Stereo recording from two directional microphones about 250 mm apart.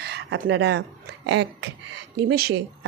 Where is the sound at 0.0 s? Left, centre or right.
Right.